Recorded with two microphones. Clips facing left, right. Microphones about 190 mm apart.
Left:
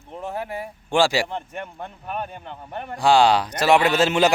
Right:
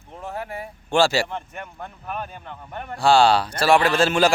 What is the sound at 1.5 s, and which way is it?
Speech, 25° left (ahead or behind).